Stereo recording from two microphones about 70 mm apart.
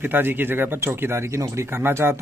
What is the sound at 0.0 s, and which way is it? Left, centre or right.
Speech, right.